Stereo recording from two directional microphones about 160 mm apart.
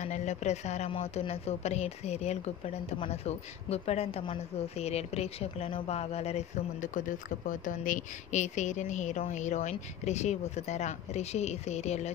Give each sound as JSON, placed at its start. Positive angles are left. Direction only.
{"t": 0.0, "sound": "speech", "side_deg": 45}